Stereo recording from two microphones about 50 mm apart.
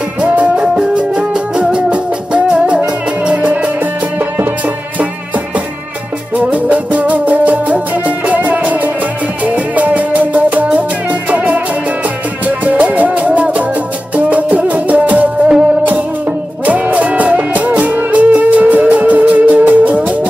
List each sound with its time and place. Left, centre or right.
0.4 s music: right
6.3 s music: right
16.6 s music: right